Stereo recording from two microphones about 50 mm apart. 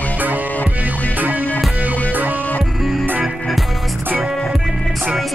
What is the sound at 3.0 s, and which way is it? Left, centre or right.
Music, right.